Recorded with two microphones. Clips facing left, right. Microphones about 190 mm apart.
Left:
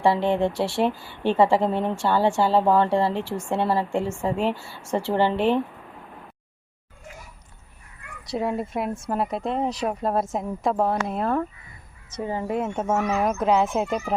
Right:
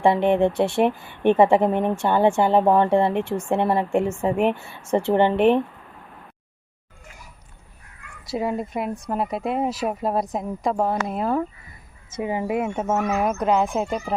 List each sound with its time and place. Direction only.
0.0 s speech: 20° right (ahead or behind)
8.3 s speech: centre (ahead or behind)